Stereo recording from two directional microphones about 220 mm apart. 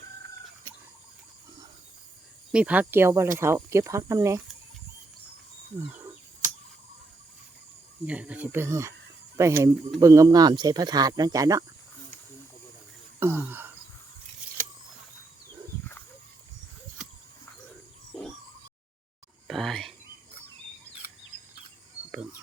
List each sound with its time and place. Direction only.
2.5 s speech: 5° right (ahead or behind)
8.0 s speech: 5° right (ahead or behind)
13.1 s speech: 10° right (ahead or behind)
19.5 s whispering: centre (ahead or behind)
22.1 s cricket: 5° right (ahead or behind)